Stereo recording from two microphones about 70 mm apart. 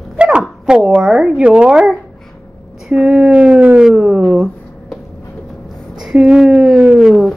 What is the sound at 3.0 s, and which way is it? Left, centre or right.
Speech, centre.